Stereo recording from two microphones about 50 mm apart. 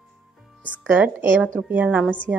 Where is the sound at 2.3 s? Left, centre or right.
Right.